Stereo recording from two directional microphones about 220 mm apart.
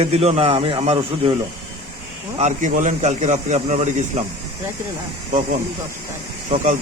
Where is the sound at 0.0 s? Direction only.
25° right (ahead or behind).